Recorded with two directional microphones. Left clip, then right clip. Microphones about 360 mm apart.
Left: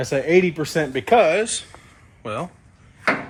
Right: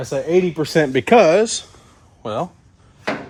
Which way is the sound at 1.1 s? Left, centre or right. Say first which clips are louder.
Right 4 dB; right.